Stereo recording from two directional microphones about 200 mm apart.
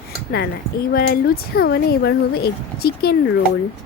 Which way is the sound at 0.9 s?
50° left (ahead or behind).